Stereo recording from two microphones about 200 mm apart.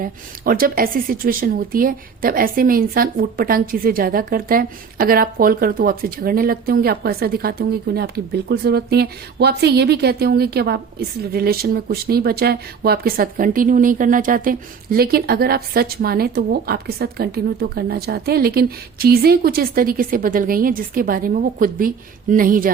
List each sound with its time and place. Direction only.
0.0 s speech: 45° right (ahead or behind)